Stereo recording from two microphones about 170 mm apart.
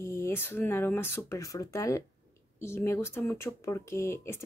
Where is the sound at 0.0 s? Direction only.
15° left (ahead or behind).